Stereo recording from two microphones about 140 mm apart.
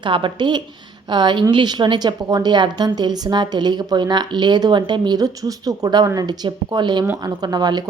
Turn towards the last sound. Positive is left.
turn(degrees=-30)  # may be behind; listen again after turning